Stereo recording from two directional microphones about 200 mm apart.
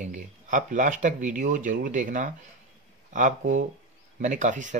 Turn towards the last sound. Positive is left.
turn(degrees=-40)  # may be behind; listen again after turning